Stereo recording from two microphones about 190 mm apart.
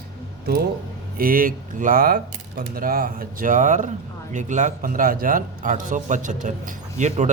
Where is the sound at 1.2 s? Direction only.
50° right (ahead or behind).